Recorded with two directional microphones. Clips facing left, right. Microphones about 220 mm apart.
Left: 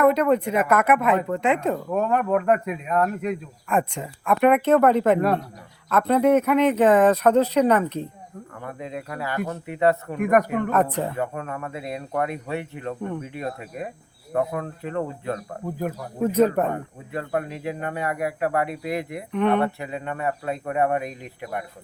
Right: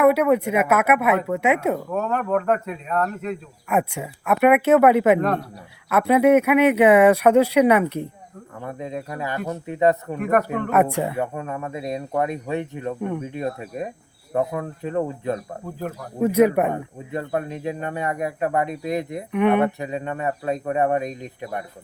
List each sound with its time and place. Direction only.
0.0 s speech: 10° right (ahead or behind)
1.9 s speech: 10° left (ahead or behind)
3.7 s speech: 10° right (ahead or behind)
8.6 s speech: 20° right (ahead or behind)
10.2 s speech: 10° left (ahead or behind)
10.7 s speech: 10° right (ahead or behind)
11.3 s speech: 25° right (ahead or behind)